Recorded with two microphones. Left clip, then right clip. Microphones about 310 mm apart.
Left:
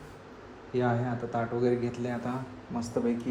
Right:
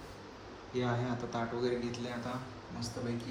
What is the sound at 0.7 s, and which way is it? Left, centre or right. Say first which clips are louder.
A man's voice: left 6 dB; centre.